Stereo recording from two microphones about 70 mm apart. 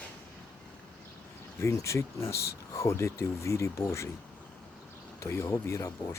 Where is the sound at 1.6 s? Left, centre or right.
Left.